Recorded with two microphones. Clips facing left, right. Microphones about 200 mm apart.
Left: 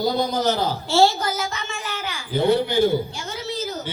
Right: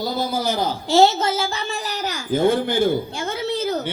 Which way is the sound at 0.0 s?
5° right (ahead or behind).